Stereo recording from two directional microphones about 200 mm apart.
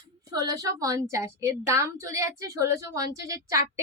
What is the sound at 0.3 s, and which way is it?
Speech, 20° right (ahead or behind).